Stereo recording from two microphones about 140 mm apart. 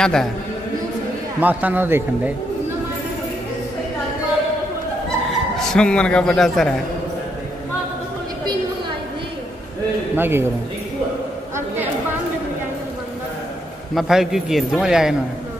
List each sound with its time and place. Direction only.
0.0 s a man's voice: 5° left (ahead or behind)
1.4 s a man's voice: 10° right (ahead or behind)
5.6 s a man's voice: 5° left (ahead or behind)
10.1 s a man's voice: 15° right (ahead or behind)
11.5 s chatter: 15° right (ahead or behind)
13.9 s a man's voice: 5° right (ahead or behind)